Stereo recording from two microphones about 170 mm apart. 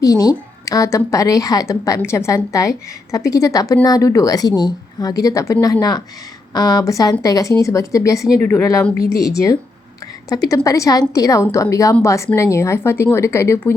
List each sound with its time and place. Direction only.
0.0 s a woman's voice: 20° left (ahead or behind)